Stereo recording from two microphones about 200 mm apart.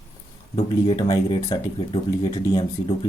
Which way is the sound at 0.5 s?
25° left (ahead or behind).